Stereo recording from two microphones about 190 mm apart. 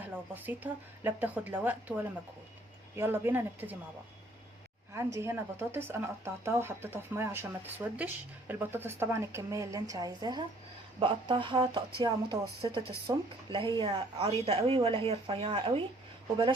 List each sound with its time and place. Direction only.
0.1 s speech: 10° right (ahead or behind)
4.9 s speech: 15° right (ahead or behind)